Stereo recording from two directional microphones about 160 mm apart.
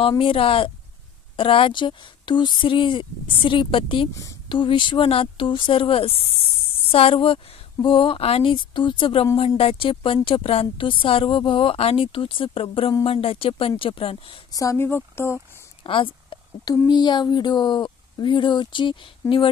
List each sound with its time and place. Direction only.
0.2 s speech: 35° left (ahead or behind)
4.1 s a woman's voice: 20° left (ahead or behind)
4.5 s speech: 30° left (ahead or behind)
14.5 s speech: 20° left (ahead or behind)
15.8 s speech: 30° left (ahead or behind)